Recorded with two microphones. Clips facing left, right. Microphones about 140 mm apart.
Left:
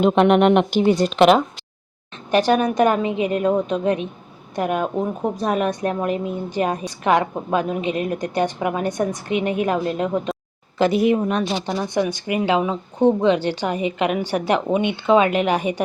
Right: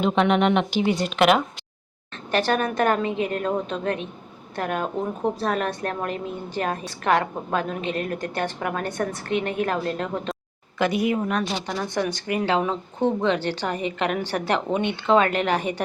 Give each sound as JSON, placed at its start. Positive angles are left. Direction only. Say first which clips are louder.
{"t": 0.0, "sound": "speech", "louder": "left 5 dB", "side_deg": 55}
{"t": 2.3, "sound": "a woman's voice", "louder": "left 5 dB", "side_deg": 15}
{"t": 10.8, "sound": "a woman's voice", "louder": "left 5 dB", "side_deg": 30}